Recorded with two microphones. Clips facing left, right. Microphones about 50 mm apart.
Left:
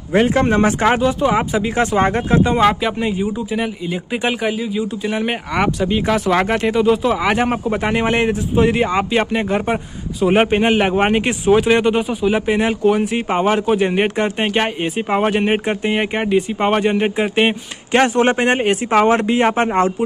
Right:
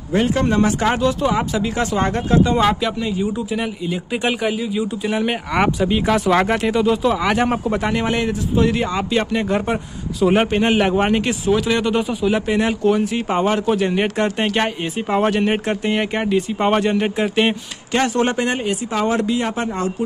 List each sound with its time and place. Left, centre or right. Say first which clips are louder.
0.1 s speech: left 3 dB; left
4.1 s speech: left 1 dB; centre
7.8 s speech: left 3 dB; left
12.0 s speech: left 1 dB; centre
17.9 s speech: left 4 dB; left